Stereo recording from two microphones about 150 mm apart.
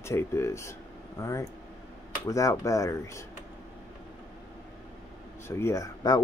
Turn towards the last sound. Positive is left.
turn(degrees=25)  # may be behind; listen again after turning